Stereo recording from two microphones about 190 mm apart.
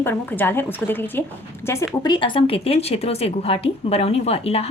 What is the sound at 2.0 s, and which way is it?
A woman's voice, 25° left (ahead or behind).